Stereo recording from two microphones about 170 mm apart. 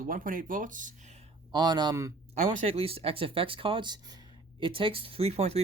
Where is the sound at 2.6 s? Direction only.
35° right (ahead or behind).